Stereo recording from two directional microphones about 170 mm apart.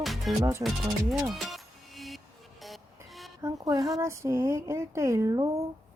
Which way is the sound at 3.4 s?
20° right (ahead or behind).